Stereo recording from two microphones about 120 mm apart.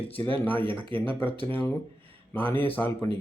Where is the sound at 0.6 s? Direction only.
40° right (ahead or behind).